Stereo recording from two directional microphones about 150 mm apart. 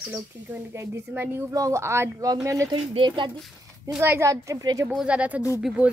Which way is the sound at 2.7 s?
35° right (ahead or behind).